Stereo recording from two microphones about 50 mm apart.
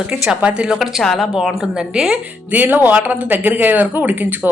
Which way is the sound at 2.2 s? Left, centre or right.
Right.